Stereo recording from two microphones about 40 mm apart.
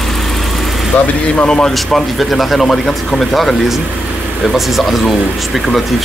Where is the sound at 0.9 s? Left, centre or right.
Left.